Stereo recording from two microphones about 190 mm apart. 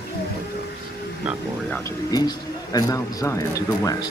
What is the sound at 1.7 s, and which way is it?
Speech, 15° left (ahead or behind).